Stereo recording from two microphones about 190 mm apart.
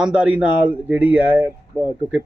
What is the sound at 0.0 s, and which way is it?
Speech, 5° right (ahead or behind).